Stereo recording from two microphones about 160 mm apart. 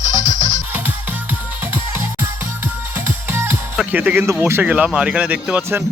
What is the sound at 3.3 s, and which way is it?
Speech, 15° right (ahead or behind).